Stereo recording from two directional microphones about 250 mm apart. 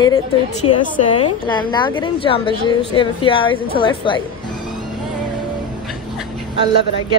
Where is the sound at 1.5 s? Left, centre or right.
Centre.